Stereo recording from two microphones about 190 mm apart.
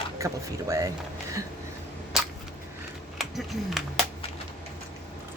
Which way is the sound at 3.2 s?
Centre (ahead or behind).